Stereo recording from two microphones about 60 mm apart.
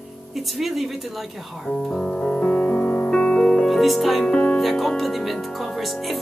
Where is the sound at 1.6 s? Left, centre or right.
Centre.